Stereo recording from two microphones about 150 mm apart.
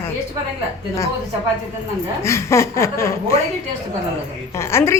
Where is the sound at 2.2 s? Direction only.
20° left (ahead or behind).